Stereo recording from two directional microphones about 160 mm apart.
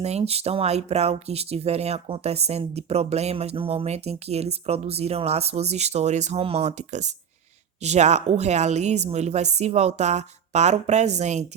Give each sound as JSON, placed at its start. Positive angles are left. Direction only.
{"t": 0.0, "sound": "speech", "side_deg": -40}